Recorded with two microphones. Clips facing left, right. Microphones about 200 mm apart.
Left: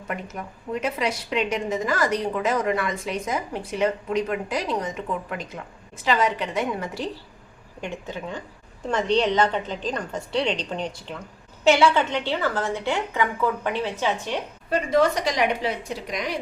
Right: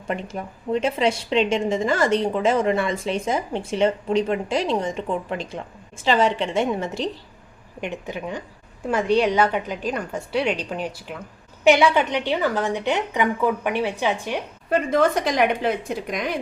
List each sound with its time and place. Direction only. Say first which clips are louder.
0.1 s a woman's voice: right 4 dB; 30° right (ahead or behind)
14.7 s a woman's voice: right 1 dB; 50° right (ahead or behind)